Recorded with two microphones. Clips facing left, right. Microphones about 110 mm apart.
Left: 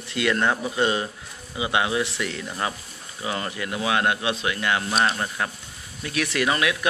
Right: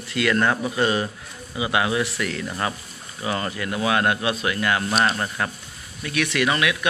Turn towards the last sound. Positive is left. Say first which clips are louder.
# right 1 dB
turn(degrees=30)  # may be behind; listen again after turning